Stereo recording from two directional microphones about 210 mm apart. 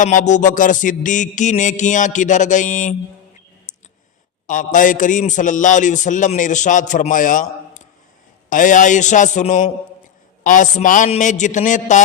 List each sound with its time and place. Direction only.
0.0 s a man's voice: 35° left (ahead or behind)
3.7 s clicking: 35° left (ahead or behind)
4.4 s a man's voice: 40° left (ahead or behind)